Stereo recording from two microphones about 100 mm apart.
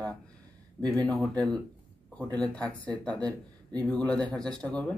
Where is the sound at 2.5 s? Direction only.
15° left (ahead or behind).